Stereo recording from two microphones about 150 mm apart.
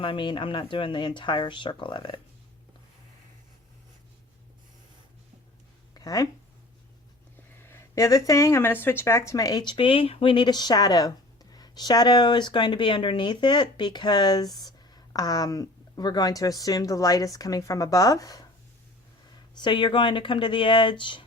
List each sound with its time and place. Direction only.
0.0 s speech: 35° left (ahead or behind)
5.9 s a sound: 25° left (ahead or behind)
7.6 s speech: 20° left (ahead or behind)
19.5 s speech: 30° left (ahead or behind)